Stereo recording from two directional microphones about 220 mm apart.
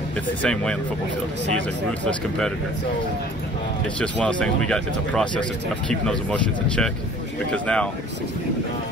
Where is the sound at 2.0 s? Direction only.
5° left (ahead or behind).